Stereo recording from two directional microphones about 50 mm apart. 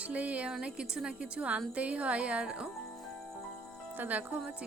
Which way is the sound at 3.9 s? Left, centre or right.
Right.